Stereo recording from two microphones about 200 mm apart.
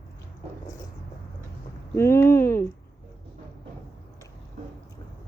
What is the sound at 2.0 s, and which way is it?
Speech, 15° left (ahead or behind).